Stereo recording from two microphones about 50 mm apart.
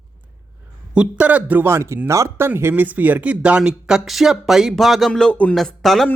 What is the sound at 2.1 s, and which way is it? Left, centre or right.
Speech, right.